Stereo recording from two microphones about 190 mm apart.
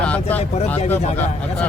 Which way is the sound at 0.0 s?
5° left (ahead or behind).